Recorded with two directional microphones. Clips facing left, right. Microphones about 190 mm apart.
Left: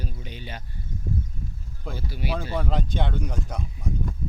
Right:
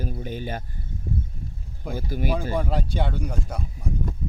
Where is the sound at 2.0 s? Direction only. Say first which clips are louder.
Right 6 dB; 45° right (ahead or behind).